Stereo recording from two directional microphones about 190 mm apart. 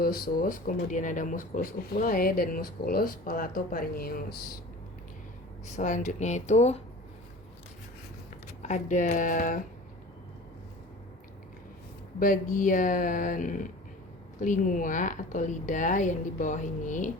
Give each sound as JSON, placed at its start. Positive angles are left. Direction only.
{"t": 0.0, "sound": "speech", "side_deg": 50}
{"t": 5.6, "sound": "a woman's voice", "side_deg": 40}
{"t": 8.6, "sound": "a woman's voice", "side_deg": 40}
{"t": 12.2, "sound": "a woman's voice", "side_deg": 45}